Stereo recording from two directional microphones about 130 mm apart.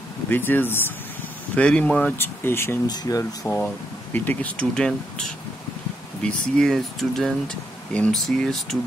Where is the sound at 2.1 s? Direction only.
20° left (ahead or behind).